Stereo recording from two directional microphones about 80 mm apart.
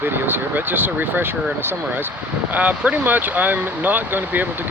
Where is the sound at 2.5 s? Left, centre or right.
Centre.